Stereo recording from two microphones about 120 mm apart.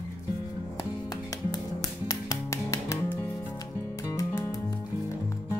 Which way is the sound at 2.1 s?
30° left (ahead or behind).